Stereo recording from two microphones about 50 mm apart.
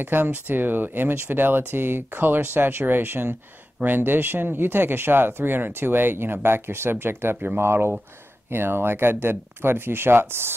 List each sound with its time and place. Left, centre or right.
0.0 s speech: right